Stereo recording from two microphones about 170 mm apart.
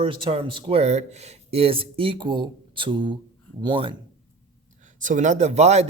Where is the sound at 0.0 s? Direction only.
30° right (ahead or behind).